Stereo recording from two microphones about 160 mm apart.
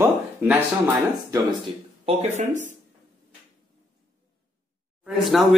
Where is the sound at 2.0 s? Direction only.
45° right (ahead or behind).